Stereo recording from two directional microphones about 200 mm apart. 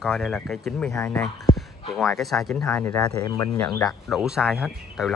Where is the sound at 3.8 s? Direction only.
Centre (ahead or behind).